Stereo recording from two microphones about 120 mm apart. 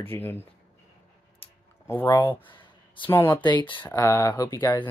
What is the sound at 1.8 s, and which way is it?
Speech, 25° left (ahead or behind).